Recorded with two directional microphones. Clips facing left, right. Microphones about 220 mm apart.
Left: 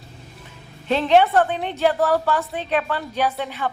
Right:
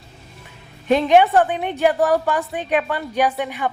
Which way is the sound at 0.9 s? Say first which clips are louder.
Right 2 dB; 15° right (ahead or behind).